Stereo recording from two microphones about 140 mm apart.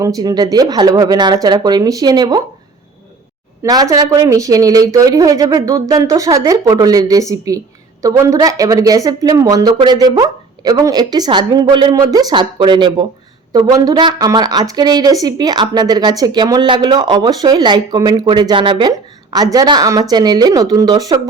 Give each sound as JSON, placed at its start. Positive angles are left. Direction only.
{"t": 0.0, "sound": "a woman's voice", "side_deg": -25}
{"t": 3.6, "sound": "a woman's voice", "side_deg": -25}